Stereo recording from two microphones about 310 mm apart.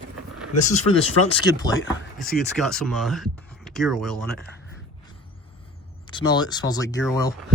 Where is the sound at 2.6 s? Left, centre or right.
Centre.